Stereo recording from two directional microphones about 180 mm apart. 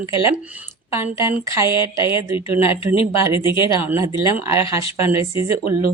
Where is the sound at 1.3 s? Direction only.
15° right (ahead or behind).